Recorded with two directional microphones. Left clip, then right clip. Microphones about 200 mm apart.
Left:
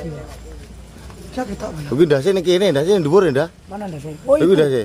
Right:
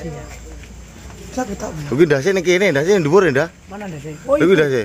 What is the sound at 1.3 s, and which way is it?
Speech, 60° right (ahead or behind).